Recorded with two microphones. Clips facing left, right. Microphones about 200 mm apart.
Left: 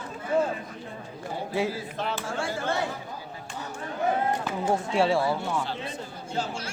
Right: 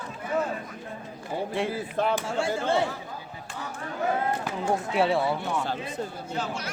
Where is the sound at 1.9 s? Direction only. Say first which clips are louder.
Right 6 dB; 50° right (ahead or behind).